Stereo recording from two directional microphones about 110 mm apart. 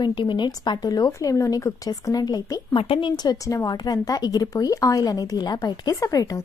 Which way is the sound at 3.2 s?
35° left (ahead or behind).